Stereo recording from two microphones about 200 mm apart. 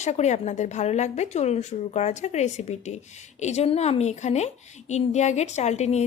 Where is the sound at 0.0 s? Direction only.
35° left (ahead or behind).